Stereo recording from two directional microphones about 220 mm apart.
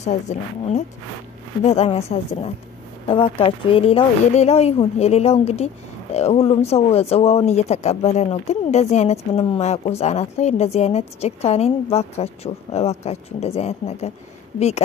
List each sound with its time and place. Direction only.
0.0 s a woman's voice: 30° left (ahead or behind)